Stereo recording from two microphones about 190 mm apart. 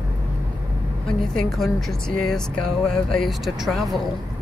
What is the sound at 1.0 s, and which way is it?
A woman's voice, 5° left (ahead or behind).